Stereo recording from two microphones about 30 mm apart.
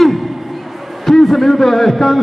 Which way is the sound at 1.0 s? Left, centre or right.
Centre.